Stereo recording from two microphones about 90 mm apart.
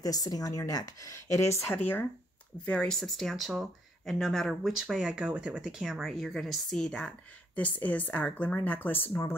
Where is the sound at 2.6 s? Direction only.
10° left (ahead or behind).